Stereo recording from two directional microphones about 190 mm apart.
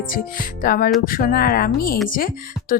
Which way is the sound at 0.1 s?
50° left (ahead or behind).